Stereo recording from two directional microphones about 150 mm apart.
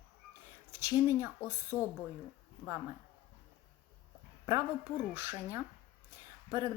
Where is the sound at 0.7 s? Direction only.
15° right (ahead or behind).